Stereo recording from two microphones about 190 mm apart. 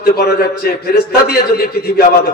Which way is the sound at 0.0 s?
55° left (ahead or behind).